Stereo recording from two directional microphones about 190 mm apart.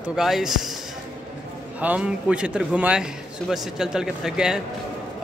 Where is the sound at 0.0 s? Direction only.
5° right (ahead or behind).